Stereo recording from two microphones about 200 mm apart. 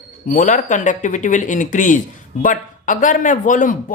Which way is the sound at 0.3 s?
40° left (ahead or behind).